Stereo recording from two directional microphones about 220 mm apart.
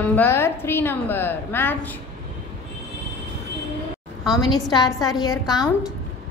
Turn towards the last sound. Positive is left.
turn(degrees=15)  # may be behind; listen again after turning